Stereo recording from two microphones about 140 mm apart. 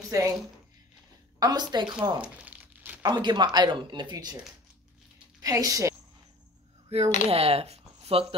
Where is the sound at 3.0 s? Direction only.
30° right (ahead or behind).